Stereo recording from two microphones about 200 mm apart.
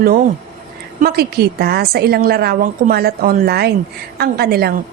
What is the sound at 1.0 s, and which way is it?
A woman's voice, 50° right (ahead or behind).